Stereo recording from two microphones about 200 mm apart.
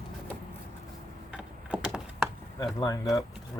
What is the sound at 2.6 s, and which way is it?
Speech, 20° left (ahead or behind).